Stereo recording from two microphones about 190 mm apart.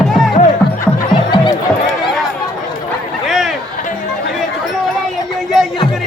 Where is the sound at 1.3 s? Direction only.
25° left (ahead or behind).